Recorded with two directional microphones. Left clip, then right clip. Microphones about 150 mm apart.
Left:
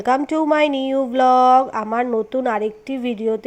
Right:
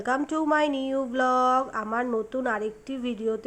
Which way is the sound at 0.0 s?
20° left (ahead or behind).